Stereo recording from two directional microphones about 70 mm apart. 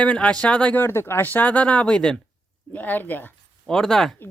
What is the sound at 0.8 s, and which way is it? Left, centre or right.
Speech, left.